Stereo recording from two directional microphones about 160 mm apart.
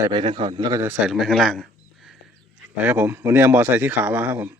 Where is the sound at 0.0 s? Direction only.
30° right (ahead or behind).